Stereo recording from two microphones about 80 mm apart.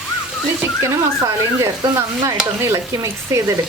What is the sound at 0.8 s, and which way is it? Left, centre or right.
Speech, right.